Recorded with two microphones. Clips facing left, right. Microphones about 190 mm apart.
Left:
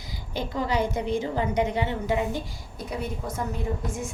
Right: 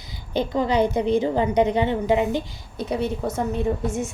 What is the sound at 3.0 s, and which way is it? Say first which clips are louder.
Speech: right 6 dB; 75° right (ahead or behind).